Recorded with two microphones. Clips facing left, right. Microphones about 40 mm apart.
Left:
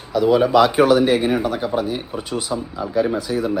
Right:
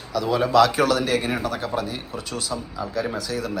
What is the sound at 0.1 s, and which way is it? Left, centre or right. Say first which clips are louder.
Speech: left 5 dB; centre.